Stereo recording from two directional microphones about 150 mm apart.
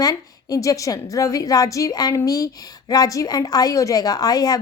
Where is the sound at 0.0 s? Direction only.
25° left (ahead or behind).